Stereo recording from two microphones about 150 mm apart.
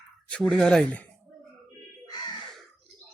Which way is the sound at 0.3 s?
5° left (ahead or behind).